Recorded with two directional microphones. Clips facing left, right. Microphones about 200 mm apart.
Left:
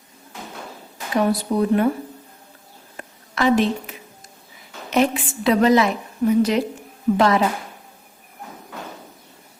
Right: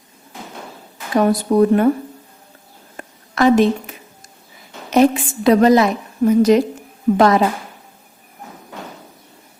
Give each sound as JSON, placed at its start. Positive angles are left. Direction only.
{"t": 1.1, "sound": "speech", "side_deg": -45}
{"t": 3.0, "sound": "a sound", "side_deg": -45}
{"t": 4.9, "sound": "a woman's voice", "side_deg": -40}